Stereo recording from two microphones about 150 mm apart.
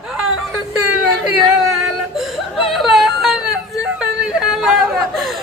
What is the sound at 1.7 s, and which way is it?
Whimper, centre (ahead or behind).